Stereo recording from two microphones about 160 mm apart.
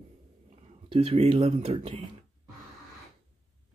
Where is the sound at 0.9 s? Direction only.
40° right (ahead or behind).